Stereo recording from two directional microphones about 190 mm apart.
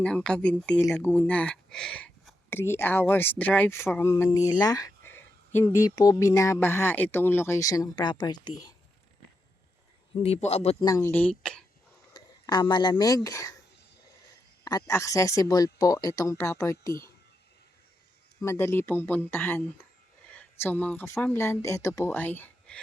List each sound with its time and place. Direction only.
0.0 s speech: 5° left (ahead or behind); by 8.5 s 25° left (ahead or behind)
10.2 s a man's voice: 35° left (ahead or behind)
10.8 s speech: 15° left (ahead or behind)
12.1 s speech: 20° left (ahead or behind)
14.6 s speech: 20° left (ahead or behind)
18.4 s speech: 15° left (ahead or behind)